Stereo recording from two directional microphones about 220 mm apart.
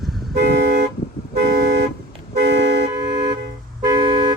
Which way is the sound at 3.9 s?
20° right (ahead or behind).